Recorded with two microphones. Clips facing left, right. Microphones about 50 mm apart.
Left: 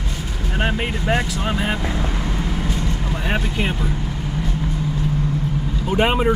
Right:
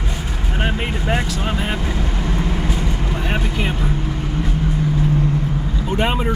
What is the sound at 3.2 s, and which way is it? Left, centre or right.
Speech, centre.